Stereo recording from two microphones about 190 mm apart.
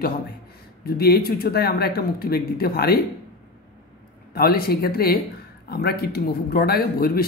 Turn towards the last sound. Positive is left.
turn(degrees=50)  # may be behind; listen again after turning